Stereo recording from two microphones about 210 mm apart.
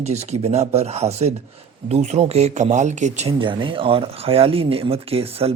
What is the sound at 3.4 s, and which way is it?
Speech, 25° right (ahead or behind).